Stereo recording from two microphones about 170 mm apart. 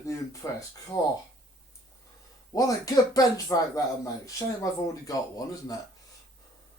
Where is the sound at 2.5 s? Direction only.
20° left (ahead or behind).